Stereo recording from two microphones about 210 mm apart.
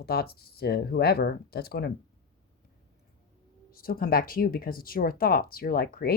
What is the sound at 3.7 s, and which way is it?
Speech, 45° left (ahead or behind).